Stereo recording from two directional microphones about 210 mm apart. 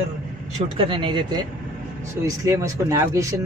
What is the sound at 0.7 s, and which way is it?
Speech, 25° right (ahead or behind).